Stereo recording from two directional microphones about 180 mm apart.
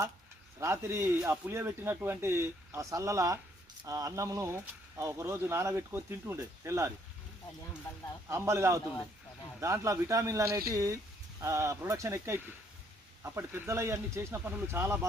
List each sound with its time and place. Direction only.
0.6 s speech: 15° right (ahead or behind)
8.3 s speech: 15° right (ahead or behind)